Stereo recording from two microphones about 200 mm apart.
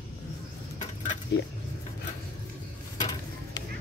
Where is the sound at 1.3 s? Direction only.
55° left (ahead or behind).